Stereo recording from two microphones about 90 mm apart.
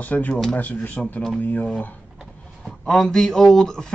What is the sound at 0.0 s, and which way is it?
A man's voice, 20° left (ahead or behind).